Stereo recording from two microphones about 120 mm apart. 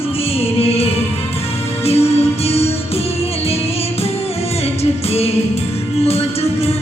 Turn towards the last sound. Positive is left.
turn(degrees=55)  # may be behind; listen again after turning